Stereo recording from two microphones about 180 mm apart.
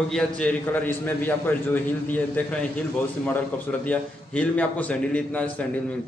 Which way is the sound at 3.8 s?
10° left (ahead or behind).